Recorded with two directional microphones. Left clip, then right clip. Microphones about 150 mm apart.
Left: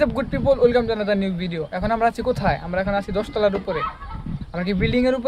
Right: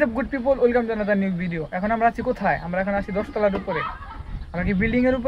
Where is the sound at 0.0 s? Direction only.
20° left (ahead or behind).